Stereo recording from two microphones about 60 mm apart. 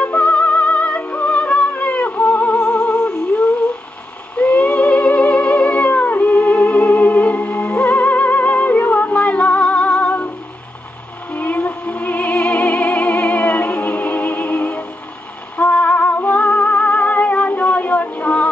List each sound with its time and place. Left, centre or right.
0.0 s music: left
4.4 s cat: left
11.3 s music: left